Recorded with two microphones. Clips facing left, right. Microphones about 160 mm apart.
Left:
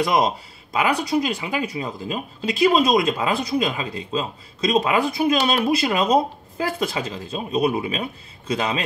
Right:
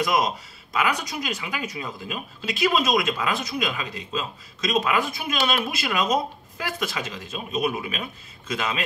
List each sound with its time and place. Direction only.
0.0 s speech: 30° left (ahead or behind)